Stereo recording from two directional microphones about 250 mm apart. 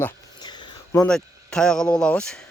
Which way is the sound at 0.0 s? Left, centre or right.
Centre.